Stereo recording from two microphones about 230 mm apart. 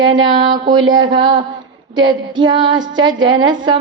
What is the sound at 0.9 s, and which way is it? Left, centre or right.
Mantra, right.